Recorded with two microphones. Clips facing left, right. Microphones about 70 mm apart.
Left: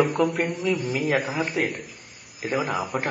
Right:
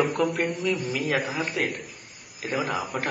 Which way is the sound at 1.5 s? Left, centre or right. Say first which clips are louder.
Left 2 dB; centre.